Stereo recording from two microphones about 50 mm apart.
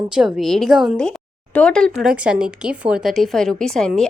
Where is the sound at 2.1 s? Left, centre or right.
Centre.